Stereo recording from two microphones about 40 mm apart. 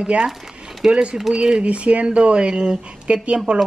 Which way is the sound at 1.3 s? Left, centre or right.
Right.